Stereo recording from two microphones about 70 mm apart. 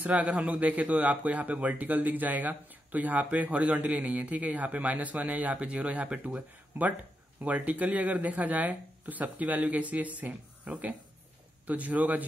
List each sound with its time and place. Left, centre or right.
0.0 s a man's voice: right